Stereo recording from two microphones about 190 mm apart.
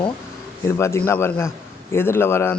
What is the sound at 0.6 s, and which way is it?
Speech, 15° left (ahead or behind).